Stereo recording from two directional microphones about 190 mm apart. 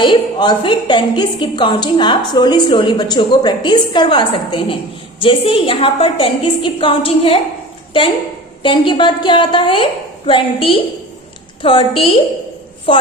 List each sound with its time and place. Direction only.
0.0 s a woman's voice: 25° left (ahead or behind)
8.6 s a woman's voice: 25° left (ahead or behind)